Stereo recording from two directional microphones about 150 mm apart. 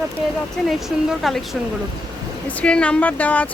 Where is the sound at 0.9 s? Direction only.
Centre (ahead or behind).